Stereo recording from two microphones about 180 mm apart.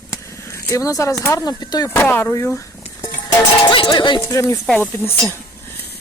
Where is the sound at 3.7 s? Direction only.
25° left (ahead or behind).